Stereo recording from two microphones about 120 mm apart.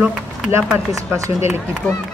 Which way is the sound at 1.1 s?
25° right (ahead or behind).